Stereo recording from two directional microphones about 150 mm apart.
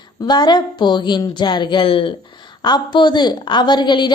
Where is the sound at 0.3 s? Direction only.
30° left (ahead or behind).